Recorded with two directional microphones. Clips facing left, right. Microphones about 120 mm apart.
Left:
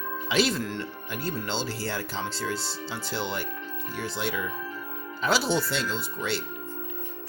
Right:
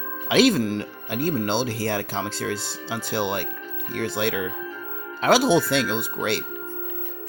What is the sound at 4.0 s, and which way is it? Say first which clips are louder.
Speech: right 6 dB; 70° right (ahead or behind).